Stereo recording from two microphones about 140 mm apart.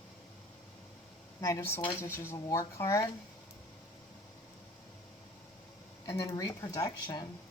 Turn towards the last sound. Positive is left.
turn(degrees=25)  # may be behind; listen again after turning